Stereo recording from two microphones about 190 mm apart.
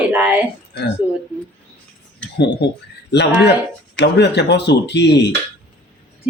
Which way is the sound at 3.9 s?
65° left (ahead or behind).